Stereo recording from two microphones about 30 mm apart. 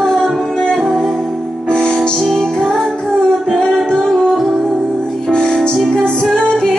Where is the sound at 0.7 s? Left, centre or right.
Centre.